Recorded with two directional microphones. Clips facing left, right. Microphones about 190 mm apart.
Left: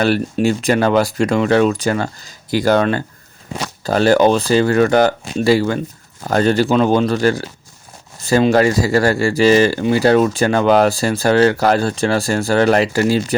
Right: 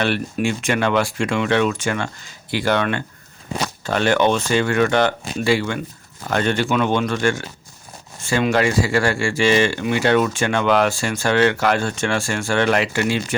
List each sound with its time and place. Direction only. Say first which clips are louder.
0.0 s speech: left 5 dB; 40° left (ahead or behind)